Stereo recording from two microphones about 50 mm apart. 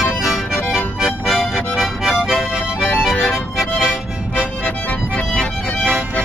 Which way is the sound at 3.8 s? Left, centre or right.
Right.